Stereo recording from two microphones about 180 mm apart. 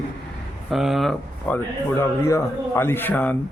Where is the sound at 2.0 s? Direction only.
15° left (ahead or behind).